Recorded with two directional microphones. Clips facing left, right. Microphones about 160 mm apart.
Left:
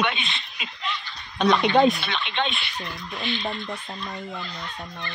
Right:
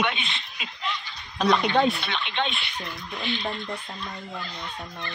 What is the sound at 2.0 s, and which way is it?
Speech, 80° left.